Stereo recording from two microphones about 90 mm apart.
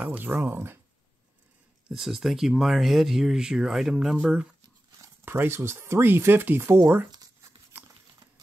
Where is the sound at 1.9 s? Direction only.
5° right (ahead or behind).